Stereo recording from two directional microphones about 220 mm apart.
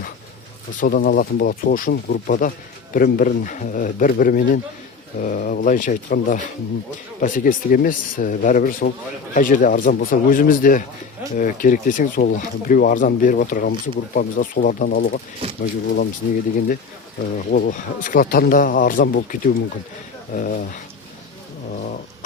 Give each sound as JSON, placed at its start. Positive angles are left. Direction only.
{"t": 0.8, "sound": "speech", "side_deg": 40}